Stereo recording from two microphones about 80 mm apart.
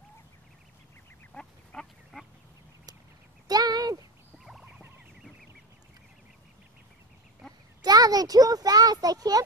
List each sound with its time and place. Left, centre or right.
1.3 s duck: centre
3.4 s a sound: right
4.5 s fowl: centre
7.8 s a child's voice: right